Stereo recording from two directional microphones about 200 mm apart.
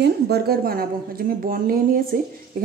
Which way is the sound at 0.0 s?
50° right (ahead or behind).